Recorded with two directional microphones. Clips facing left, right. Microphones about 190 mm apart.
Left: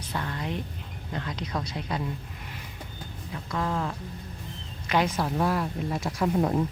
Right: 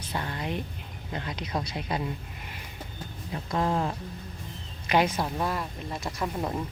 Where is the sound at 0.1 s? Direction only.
20° right (ahead or behind).